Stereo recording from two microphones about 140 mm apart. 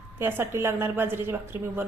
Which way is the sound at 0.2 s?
15° right (ahead or behind).